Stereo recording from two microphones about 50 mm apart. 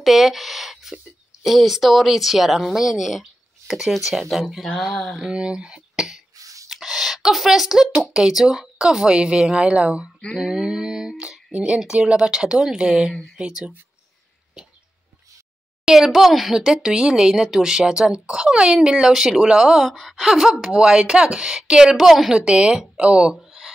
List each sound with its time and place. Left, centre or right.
0.0 s a sound: centre
0.9 s speech: centre
5.2 s speech: centre
10.3 s speech: centre
15.8 s speech: centre
16.5 s speech: centre
19.9 s speech: centre
20.2 s speech: centre
21.9 s speech: centre
22.3 s speech: centre
23.3 s a sound: centre